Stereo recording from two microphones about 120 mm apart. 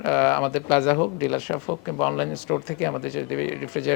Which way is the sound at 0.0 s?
15° left (ahead or behind).